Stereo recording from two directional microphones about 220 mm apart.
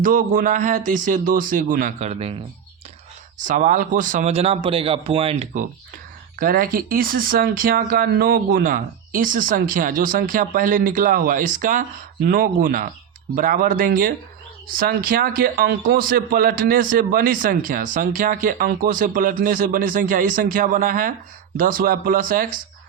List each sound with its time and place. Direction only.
0.0 s speech: 40° right (ahead or behind)
3.3 s speech: 35° right (ahead or behind)
6.4 s speech: 40° right (ahead or behind)